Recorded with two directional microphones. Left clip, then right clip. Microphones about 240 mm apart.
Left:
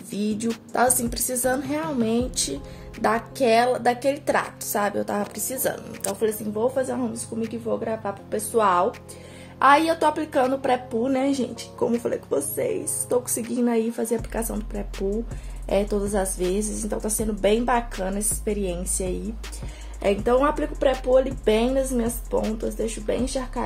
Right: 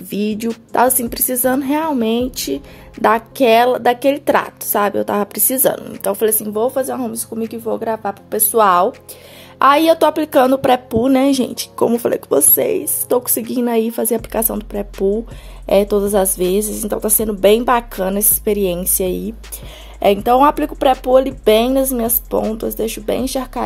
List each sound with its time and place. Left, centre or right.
0.1 s a woman's voice: right